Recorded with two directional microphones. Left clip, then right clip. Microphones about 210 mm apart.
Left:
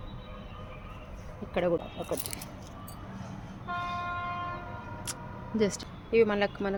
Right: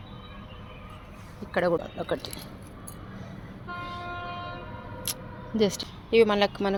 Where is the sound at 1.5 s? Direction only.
15° right (ahead or behind).